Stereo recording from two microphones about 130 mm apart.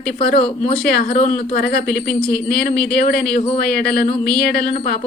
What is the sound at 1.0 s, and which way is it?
Speech, 60° left (ahead or behind).